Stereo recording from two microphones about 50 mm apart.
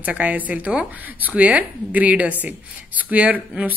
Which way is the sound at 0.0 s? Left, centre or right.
Right.